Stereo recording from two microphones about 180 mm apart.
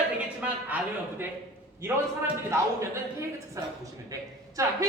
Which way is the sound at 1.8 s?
15° right (ahead or behind).